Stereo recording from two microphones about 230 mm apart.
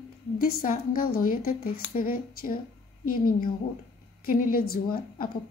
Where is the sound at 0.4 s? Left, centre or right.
Left.